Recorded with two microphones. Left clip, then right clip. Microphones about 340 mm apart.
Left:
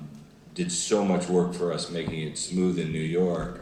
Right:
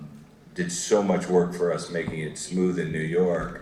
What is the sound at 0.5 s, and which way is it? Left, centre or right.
Speech, right.